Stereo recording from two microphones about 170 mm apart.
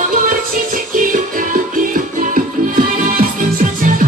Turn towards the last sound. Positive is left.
turn(degrees=-50)  # may be behind; listen again after turning